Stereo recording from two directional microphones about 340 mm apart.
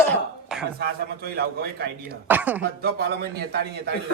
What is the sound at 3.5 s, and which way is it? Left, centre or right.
Speech, right.